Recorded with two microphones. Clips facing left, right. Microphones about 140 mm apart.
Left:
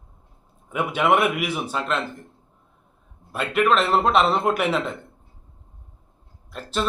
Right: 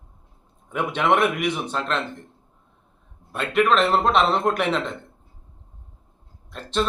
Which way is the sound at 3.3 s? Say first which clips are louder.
Even; centre (ahead or behind).